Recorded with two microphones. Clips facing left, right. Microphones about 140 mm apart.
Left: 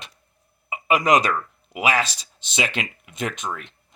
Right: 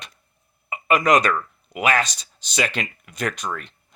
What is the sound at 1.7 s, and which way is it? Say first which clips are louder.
Speech: right 1 dB; 5° left (ahead or behind).